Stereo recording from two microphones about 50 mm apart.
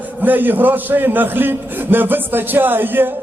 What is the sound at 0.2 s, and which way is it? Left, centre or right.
A man's voice, right.